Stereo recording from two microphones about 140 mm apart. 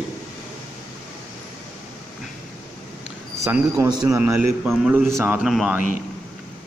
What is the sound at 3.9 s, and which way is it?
Speech, 30° right (ahead or behind).